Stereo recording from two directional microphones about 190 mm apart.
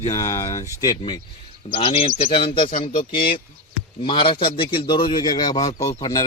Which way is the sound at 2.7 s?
45° left (ahead or behind).